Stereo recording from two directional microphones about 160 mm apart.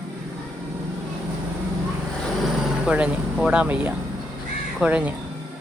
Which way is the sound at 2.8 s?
5° right (ahead or behind).